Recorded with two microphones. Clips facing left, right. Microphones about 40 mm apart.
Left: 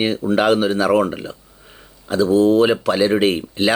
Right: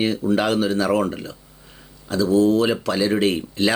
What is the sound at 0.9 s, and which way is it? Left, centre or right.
Speech, centre.